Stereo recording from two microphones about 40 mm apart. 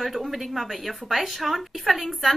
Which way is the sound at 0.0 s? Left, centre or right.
Centre.